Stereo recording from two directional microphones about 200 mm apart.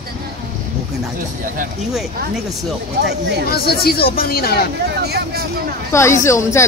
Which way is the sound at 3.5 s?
50° left (ahead or behind).